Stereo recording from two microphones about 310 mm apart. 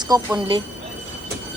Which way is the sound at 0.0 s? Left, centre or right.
Centre.